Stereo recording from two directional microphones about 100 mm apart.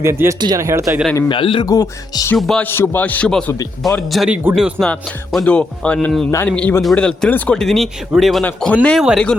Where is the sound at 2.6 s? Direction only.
20° left (ahead or behind).